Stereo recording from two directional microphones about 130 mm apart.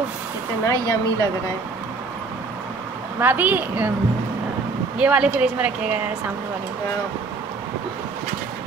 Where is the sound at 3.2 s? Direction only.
15° right (ahead or behind).